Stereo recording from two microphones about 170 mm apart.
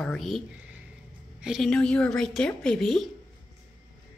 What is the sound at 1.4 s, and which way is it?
A woman's voice, centre (ahead or behind).